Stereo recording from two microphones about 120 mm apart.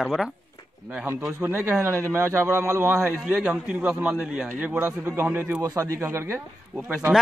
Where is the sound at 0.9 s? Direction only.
15° right (ahead or behind).